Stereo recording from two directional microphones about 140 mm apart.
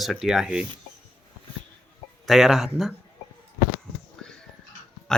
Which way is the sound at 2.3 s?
Centre (ahead or behind).